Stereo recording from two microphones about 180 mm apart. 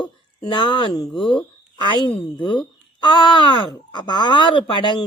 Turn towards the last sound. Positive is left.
turn(degrees=25)  # may be behind; listen again after turning